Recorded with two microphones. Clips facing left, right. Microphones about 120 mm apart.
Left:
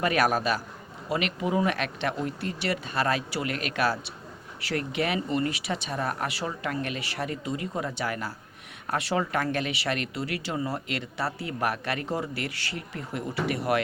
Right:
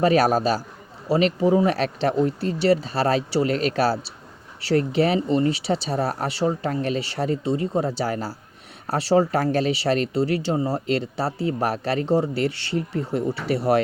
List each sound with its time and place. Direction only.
0.0 s speech: 30° right (ahead or behind)